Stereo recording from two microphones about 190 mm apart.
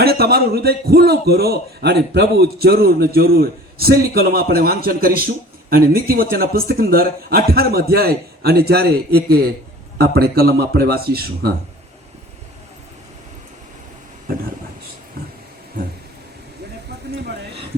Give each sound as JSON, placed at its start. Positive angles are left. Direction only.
{"t": 0.0, "sound": "a man's voice", "side_deg": -55}